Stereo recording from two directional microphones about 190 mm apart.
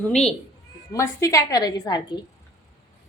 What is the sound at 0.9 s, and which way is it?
A woman's voice, 15° left (ahead or behind).